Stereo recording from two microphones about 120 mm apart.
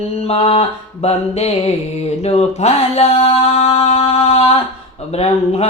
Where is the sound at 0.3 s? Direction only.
55° left (ahead or behind).